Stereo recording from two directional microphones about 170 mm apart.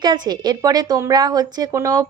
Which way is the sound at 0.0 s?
25° right (ahead or behind).